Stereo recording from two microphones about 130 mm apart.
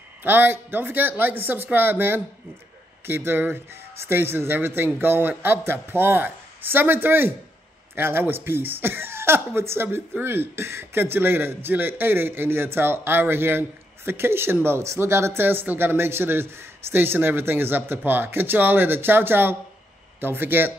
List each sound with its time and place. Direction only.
0.2 s speech: 15° right (ahead or behind)